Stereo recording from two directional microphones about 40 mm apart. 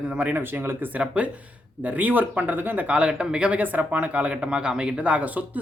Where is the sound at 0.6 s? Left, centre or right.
Right.